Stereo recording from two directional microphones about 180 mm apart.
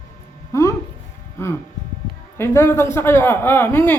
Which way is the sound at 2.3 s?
15° left (ahead or behind).